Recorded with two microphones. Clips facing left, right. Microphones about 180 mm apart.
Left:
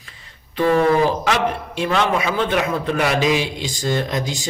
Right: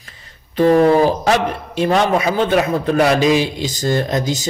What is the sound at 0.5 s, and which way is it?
A man's voice, 40° right (ahead or behind).